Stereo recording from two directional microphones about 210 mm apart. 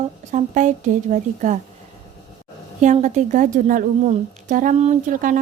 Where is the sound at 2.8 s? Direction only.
35° right (ahead or behind).